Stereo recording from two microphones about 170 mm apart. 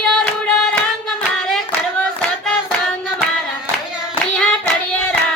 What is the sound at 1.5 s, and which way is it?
Hands, centre (ahead or behind).